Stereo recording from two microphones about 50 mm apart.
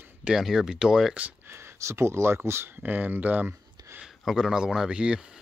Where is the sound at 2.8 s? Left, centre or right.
Right.